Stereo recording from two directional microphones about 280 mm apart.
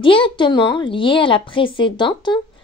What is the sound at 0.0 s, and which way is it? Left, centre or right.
Speech, centre.